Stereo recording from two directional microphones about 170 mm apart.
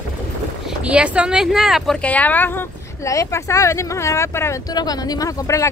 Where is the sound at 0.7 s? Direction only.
5° right (ahead or behind).